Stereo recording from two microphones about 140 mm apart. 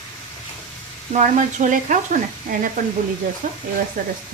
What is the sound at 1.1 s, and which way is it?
A woman's voice, 60° right (ahead or behind).